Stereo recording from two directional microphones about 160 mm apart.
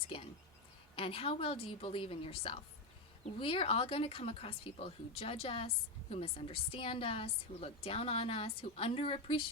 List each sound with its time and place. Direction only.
0.1 s speech: 30° left (ahead or behind)